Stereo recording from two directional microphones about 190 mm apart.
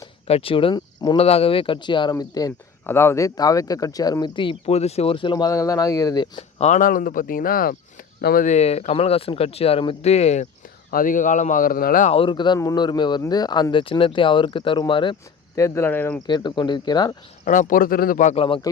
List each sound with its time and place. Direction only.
0.0 s speech: 30° left (ahead or behind)
6.6 s speech: 40° left (ahead or behind)
12.1 s speech: 25° left (ahead or behind)
15.5 s speech: 15° left (ahead or behind)
16.2 s speech: 25° left (ahead or behind)
17.4 s speech: 45° left (ahead or behind)
18.4 s speech: 25° left (ahead or behind)